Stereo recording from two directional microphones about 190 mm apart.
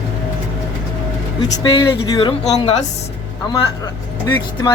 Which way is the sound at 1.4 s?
25° left (ahead or behind).